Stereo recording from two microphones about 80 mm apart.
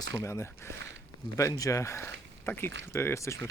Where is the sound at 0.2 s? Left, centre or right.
Left.